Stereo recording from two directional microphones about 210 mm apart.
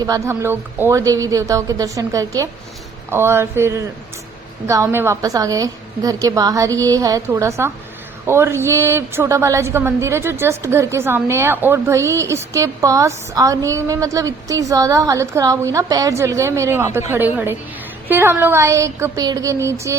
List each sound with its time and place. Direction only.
0.0 s a woman's voice: 15° right (ahead or behind)